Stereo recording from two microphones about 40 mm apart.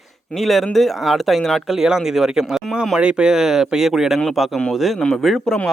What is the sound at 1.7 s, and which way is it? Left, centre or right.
Speech, centre.